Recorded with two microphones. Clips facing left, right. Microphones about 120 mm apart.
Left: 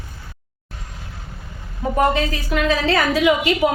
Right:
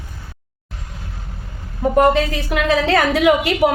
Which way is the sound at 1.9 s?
65° right (ahead or behind).